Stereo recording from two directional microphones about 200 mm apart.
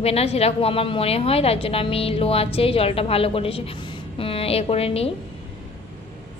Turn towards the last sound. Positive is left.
turn(degrees=30)  # may be behind; listen again after turning